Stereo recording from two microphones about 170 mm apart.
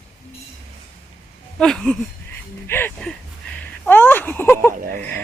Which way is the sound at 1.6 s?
5° left (ahead or behind).